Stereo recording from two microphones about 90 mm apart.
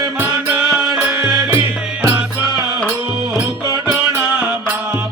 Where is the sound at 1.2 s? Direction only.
50° right (ahead or behind).